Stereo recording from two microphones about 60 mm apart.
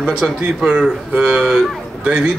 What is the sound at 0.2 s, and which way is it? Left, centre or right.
Speech, centre.